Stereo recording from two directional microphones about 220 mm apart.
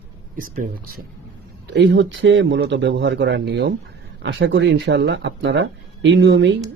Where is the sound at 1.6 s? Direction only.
50° right (ahead or behind).